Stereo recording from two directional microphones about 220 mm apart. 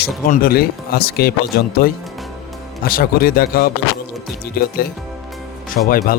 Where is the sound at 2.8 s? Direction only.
40° left (ahead or behind).